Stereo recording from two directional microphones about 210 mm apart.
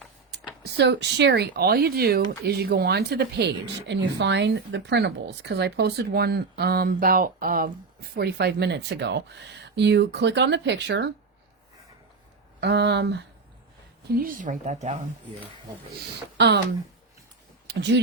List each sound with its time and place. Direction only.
0.6 s speech: 55° right (ahead or behind)
12.5 s speech: 50° right (ahead or behind)
14.2 s speech: 40° right (ahead or behind)
16.0 s speech: 50° right (ahead or behind)
17.7 s speech: 55° right (ahead or behind)